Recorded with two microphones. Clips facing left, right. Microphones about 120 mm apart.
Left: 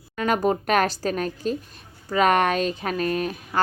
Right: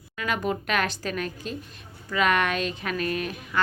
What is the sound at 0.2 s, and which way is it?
Speech, 40° left (ahead or behind).